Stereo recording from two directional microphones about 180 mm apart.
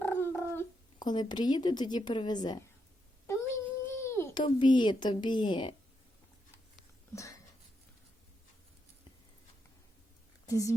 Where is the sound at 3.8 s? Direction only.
15° left (ahead or behind).